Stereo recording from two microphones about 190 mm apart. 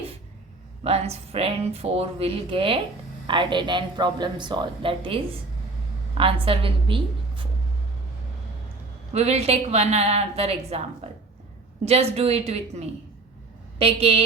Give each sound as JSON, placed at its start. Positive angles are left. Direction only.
{"t": 0.9, "sound": "a woman's voice", "side_deg": -35}
{"t": 9.1, "sound": "a woman's voice", "side_deg": -35}